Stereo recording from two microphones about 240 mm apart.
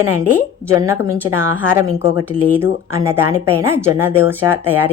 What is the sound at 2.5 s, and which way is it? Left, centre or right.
A woman's voice, centre.